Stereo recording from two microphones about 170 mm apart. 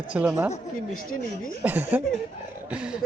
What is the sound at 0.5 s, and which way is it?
A woman's voice, 55° left (ahead or behind).